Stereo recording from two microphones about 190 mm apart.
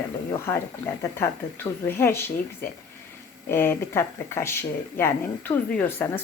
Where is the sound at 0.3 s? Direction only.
15° left (ahead or behind).